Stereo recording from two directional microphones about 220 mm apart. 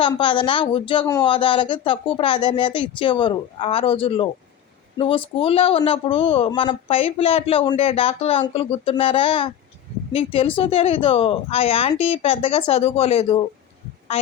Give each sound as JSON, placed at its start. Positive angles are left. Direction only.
{"t": 0.0, "sound": "speech", "side_deg": 20}